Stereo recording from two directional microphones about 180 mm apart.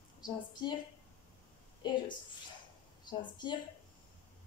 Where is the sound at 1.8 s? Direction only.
25° left (ahead or behind).